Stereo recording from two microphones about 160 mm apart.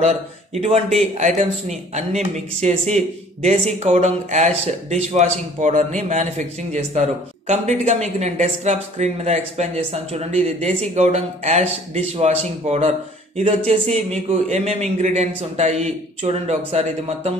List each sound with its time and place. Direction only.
0.6 s speech: 40° right (ahead or behind)